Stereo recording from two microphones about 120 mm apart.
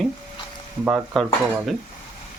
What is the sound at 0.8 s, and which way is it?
Stir, 10° right (ahead or behind).